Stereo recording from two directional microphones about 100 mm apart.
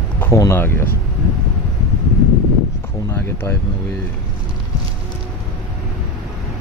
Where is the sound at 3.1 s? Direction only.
25° left (ahead or behind).